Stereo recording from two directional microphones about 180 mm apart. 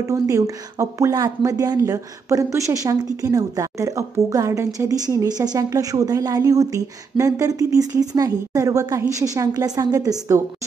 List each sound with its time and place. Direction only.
0.1 s speech: 15° right (ahead or behind)